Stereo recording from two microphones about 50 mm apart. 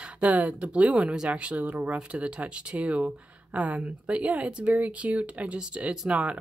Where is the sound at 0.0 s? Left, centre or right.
Right.